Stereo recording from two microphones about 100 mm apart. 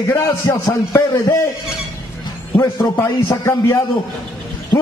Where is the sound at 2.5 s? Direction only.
25° left (ahead or behind).